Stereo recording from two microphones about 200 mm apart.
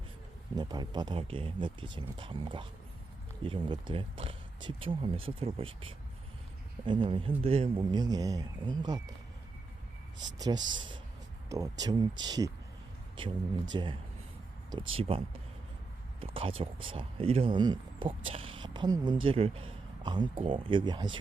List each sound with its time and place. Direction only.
0.5 s speech: 20° right (ahead or behind)
10.2 s speech: 20° right (ahead or behind)
14.9 s speech: 30° right (ahead or behind)
16.2 s speech: 30° right (ahead or behind)